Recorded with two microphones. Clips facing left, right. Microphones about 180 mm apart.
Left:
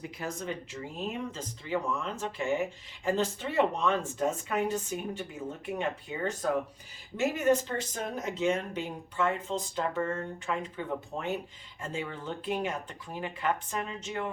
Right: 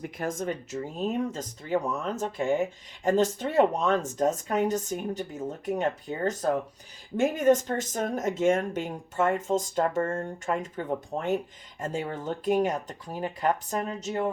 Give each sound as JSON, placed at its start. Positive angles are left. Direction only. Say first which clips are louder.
{"t": 0.0, "sound": "speech", "louder": "right 6 dB", "side_deg": -50}